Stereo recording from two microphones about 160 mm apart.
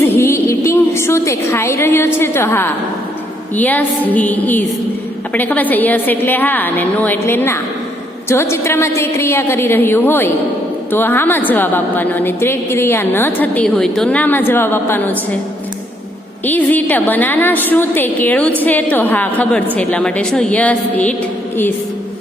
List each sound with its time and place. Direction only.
0.0 s a sound: 15° left (ahead or behind)
2.1 s a woman's voice: 15° left (ahead or behind)
16.5 s a woman's voice: 10° left (ahead or behind)